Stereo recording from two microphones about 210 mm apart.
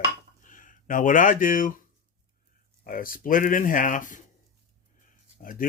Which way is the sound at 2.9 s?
40° left (ahead or behind).